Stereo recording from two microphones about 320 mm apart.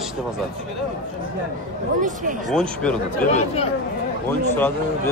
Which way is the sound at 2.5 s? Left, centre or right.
Centre.